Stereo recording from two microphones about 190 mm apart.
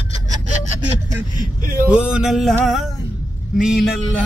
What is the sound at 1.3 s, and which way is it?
Speech, 50° right (ahead or behind).